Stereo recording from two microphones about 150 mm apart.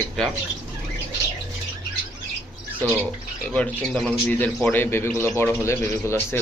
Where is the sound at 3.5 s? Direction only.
5° left (ahead or behind).